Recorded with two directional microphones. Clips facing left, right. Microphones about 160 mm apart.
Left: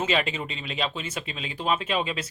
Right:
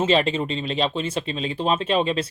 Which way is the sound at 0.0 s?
30° right (ahead or behind).